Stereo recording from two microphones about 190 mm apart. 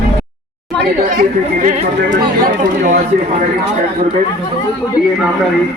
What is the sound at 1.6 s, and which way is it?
Speech, 45° right (ahead or behind).